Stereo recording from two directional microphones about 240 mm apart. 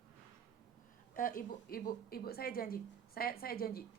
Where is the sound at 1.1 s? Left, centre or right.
Left.